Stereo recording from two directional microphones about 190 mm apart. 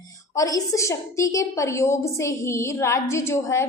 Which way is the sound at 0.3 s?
20° left (ahead or behind).